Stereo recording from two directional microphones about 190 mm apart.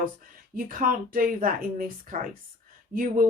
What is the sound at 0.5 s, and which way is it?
Speech, 45° right (ahead or behind).